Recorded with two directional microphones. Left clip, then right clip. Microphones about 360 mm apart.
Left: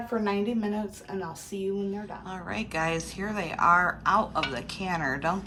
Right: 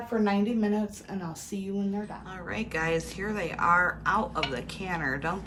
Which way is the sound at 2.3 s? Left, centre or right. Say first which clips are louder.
Left 1 dB; centre.